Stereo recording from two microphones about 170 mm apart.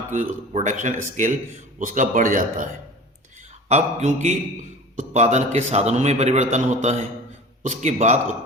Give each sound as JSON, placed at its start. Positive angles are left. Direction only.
{"t": 0.1, "sound": "speech", "side_deg": -45}
{"t": 3.7, "sound": "a man's voice", "side_deg": -40}